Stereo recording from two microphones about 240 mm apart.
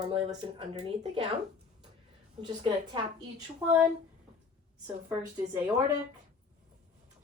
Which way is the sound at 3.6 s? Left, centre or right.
Centre.